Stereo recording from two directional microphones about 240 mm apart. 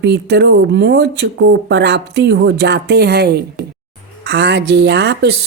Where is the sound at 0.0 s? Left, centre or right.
Right.